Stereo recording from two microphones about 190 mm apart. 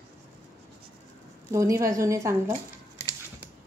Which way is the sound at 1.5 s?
15° right (ahead or behind).